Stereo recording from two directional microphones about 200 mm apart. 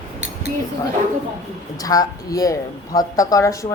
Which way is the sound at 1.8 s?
15° left (ahead or behind).